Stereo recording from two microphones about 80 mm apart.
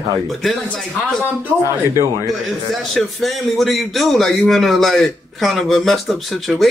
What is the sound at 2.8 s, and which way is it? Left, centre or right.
A man's voice, centre.